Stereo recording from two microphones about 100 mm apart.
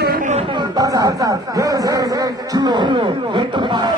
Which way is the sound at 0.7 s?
35° right (ahead or behind).